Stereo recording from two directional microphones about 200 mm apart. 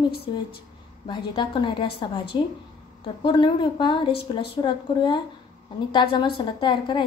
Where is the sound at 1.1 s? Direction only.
25° left (ahead or behind).